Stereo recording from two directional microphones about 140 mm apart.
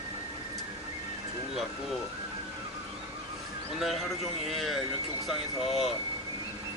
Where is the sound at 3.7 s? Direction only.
Centre (ahead or behind).